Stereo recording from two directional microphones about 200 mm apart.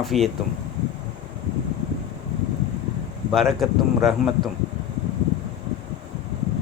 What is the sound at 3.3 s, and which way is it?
Speech, centre (ahead or behind).